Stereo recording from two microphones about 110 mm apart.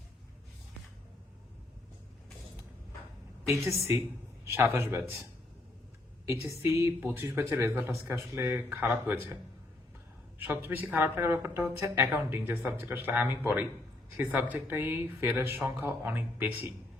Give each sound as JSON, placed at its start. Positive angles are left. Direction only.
{"t": 3.4, "sound": "a woman's voice", "side_deg": -25}
{"t": 6.2, "sound": "speech", "side_deg": -25}